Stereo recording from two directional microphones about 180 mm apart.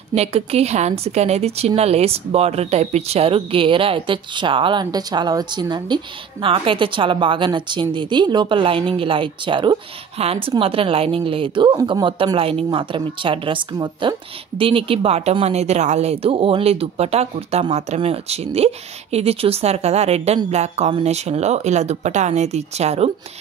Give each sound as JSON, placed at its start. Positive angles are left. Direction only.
{"t": 0.1, "sound": "a woman's voice", "side_deg": -35}